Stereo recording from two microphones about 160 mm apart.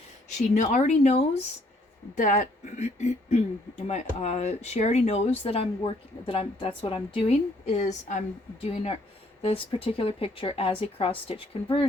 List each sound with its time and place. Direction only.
0.3 s speech: 50° left (ahead or behind)
2.1 s speech: 55° left (ahead or behind); by 11.9 s 35° left (ahead or behind)